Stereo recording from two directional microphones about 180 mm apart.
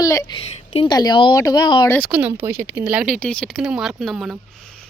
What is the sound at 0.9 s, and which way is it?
Speech, 20° left (ahead or behind).